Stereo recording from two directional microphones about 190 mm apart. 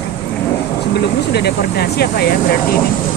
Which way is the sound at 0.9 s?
60° left (ahead or behind).